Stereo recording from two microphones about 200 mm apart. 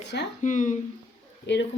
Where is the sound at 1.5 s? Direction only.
60° left (ahead or behind).